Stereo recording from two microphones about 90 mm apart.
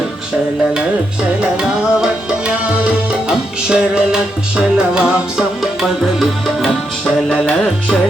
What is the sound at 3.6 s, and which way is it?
Music, 10° right (ahead or behind).